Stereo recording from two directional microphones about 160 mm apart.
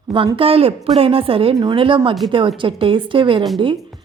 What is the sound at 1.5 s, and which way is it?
A woman's voice, 25° right (ahead or behind).